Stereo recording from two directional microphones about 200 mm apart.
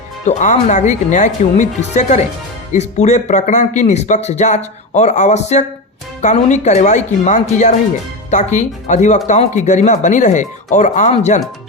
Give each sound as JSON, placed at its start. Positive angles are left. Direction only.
{"t": 0.3, "sound": "speech", "side_deg": 35}